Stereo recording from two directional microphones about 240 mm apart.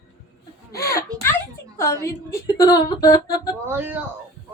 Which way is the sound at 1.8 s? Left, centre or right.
Centre.